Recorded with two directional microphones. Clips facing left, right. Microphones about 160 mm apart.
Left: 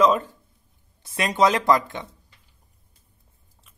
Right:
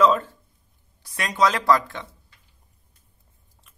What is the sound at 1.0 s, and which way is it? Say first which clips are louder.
A man's voice: left 2 dB; 25° left (ahead or behind).